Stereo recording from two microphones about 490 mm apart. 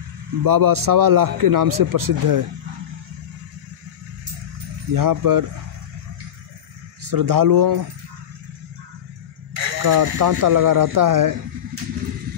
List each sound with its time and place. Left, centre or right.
0.4 s a man's voice: right
4.9 s a man's voice: right
7.1 s a man's voice: right
9.5 s speech: right